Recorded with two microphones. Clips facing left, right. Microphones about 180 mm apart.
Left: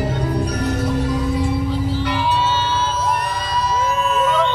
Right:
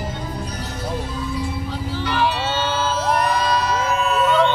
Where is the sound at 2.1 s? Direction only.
65° right (ahead or behind).